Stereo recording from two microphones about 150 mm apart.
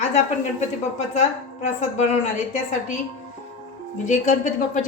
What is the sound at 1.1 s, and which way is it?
A woman's voice, 50° left (ahead or behind).